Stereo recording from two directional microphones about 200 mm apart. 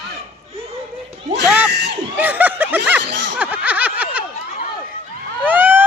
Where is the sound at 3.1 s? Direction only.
60° right (ahead or behind).